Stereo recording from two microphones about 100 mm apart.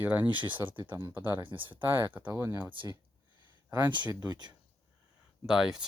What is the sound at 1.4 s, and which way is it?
Speech, 55° right (ahead or behind).